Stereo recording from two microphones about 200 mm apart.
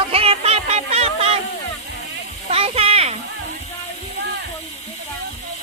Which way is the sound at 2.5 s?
30° right (ahead or behind).